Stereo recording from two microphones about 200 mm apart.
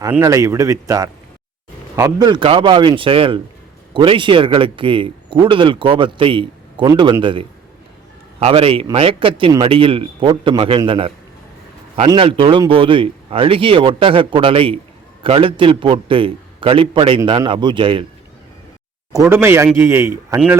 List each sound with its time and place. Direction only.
0.1 s a man's voice: 15° right (ahead or behind)
19.1 s a man's voice: 15° right (ahead or behind)